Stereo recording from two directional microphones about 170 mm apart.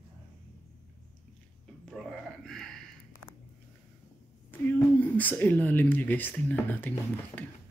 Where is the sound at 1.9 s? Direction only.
Centre (ahead or behind).